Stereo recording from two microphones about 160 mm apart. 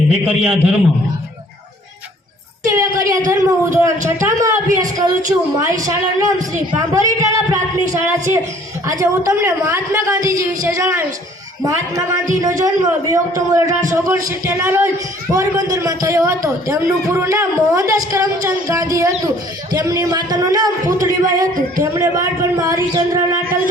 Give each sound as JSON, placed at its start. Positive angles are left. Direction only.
{"t": 0.1, "sound": "a man's voice", "side_deg": -10}
{"t": 2.6, "sound": "speech", "side_deg": -20}